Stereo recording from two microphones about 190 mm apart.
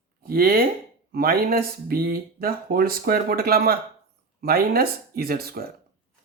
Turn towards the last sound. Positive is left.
turn(degrees=-55)  # may be behind; listen again after turning